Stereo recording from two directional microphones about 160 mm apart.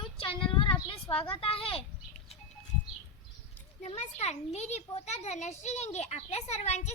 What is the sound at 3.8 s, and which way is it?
A child's voice, 40° left (ahead or behind).